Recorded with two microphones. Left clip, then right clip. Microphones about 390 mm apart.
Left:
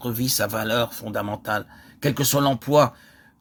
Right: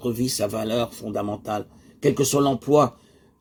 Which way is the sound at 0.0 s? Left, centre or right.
Left.